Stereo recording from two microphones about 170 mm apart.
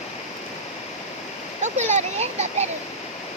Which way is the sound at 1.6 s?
40° right (ahead or behind).